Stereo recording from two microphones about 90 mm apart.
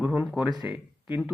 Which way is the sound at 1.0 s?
20° right (ahead or behind).